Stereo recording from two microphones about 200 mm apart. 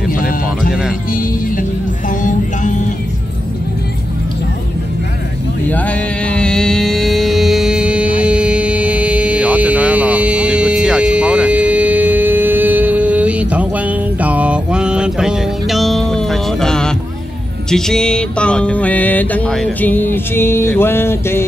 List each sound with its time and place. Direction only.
1.1 s music: 40° left (ahead or behind)
5.7 s music: 5° left (ahead or behind)